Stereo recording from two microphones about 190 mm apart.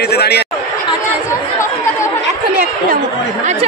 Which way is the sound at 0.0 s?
60° left (ahead or behind).